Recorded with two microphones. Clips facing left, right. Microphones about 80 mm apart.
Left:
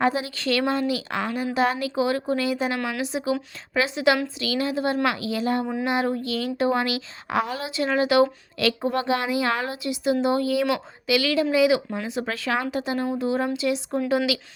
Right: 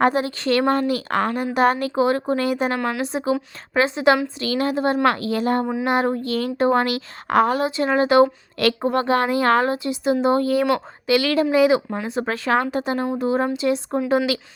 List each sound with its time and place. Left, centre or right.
0.0 s speech: right
8.5 s speech: right
9.6 s a woman's voice: right